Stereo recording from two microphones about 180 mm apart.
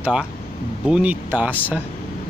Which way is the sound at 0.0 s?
5° right (ahead or behind).